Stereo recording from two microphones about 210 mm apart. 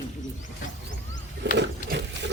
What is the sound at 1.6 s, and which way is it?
Sewing machine, 55° right (ahead or behind).